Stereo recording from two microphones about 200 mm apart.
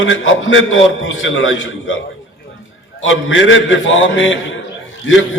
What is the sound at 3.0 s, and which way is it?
A man's voice, 70° left (ahead or behind).